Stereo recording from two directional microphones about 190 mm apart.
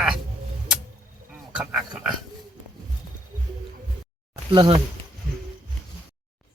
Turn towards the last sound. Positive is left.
turn(degrees=-25)  # may be behind; listen again after turning